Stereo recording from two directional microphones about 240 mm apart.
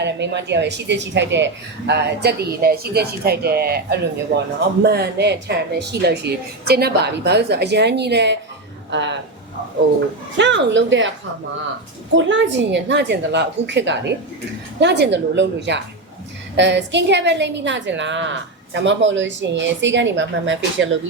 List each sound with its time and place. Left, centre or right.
0.0 s a woman's voice: right
10.3 s a woman's voice: right
12.1 s a woman's voice: right